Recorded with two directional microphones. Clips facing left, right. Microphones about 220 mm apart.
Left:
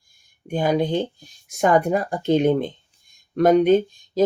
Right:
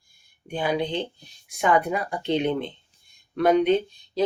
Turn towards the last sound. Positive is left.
turn(degrees=45)  # may be behind; listen again after turning